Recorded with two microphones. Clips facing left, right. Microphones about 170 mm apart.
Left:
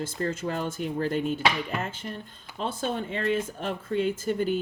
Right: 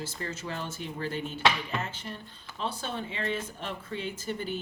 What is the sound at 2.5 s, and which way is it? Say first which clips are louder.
Speech: left 5 dB; 45° left (ahead or behind).